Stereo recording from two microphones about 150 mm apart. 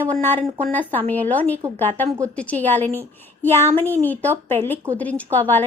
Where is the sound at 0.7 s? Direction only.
10° left (ahead or behind).